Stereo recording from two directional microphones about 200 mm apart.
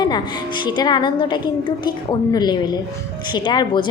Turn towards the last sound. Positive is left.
turn(degrees=20)  # may be behind; listen again after turning